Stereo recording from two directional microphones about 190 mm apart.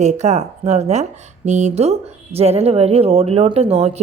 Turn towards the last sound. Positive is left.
turn(degrees=-35)  # may be behind; listen again after turning